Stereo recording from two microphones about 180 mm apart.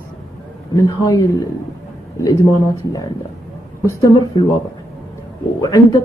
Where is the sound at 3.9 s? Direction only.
20° left (ahead or behind).